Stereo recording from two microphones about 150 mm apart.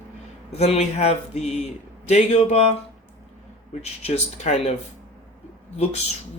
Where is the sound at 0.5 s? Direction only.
45° left (ahead or behind).